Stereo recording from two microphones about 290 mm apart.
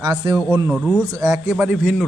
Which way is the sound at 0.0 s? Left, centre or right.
Centre.